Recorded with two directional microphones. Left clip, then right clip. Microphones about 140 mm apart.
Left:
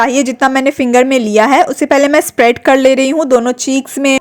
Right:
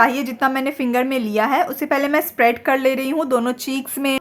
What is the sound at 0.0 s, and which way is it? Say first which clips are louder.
A woman's voice: left 6 dB; 50° left (ahead or behind).